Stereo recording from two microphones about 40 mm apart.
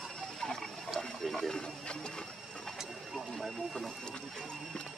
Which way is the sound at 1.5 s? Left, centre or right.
Centre.